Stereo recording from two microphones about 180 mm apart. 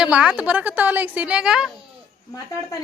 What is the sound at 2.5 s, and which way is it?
Speech, 15° left (ahead or behind).